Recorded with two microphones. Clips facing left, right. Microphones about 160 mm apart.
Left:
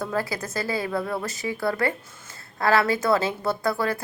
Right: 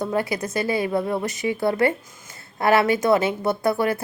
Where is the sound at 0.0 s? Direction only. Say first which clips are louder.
Right 4 dB; 20° right (ahead or behind).